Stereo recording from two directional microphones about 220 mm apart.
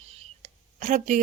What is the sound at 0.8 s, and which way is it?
Speech, 35° right (ahead or behind).